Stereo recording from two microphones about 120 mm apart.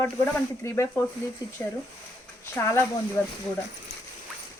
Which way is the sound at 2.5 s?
20° left (ahead or behind).